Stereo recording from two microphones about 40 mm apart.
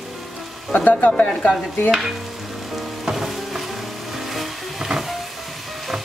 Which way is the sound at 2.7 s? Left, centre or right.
Centre.